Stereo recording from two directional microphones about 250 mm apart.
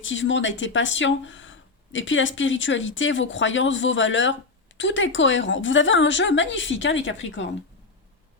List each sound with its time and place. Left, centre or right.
0.0 s speech: left